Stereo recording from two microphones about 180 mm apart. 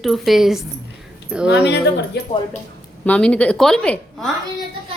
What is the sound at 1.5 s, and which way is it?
Speech, 70° left (ahead or behind).